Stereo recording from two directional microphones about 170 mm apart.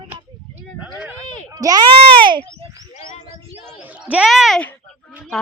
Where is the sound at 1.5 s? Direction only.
25° right (ahead or behind).